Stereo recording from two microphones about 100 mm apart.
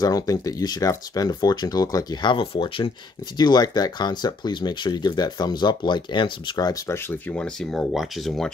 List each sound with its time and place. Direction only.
0.0 s speech: 35° left (ahead or behind)
2.2 s speech: 60° left (ahead or behind)
3.3 s speech: 45° left (ahead or behind)
6.9 s speech: 20° left (ahead or behind)
7.3 s speech: 10° left (ahead or behind)